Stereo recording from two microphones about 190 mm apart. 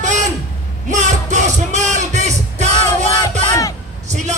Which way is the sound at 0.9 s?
40° right (ahead or behind).